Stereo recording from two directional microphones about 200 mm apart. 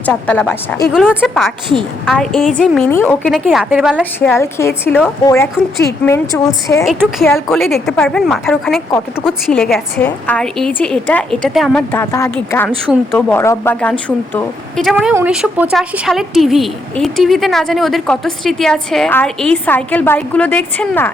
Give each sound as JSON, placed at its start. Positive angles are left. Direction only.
{"t": 0.0, "sound": "a woman's voice", "side_deg": 5}
{"t": 0.9, "sound": "speech", "side_deg": -5}
{"t": 4.2, "sound": "a woman's voice", "side_deg": 10}
{"t": 7.5, "sound": "speech", "side_deg": 0}
{"t": 12.9, "sound": "a woman's voice", "side_deg": 0}
{"t": 14.3, "sound": "speech", "side_deg": 0}